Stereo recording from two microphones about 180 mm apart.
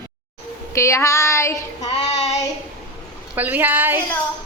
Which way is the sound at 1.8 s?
35° left (ahead or behind).